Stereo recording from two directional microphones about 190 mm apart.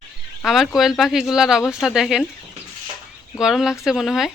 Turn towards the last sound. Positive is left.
turn(degrees=0)  # may be behind; listen again after turning